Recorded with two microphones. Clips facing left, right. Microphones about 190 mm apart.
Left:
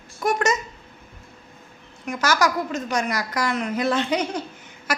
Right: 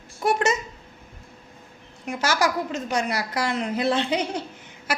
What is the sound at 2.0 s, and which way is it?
A woman's voice, 30° right (ahead or behind).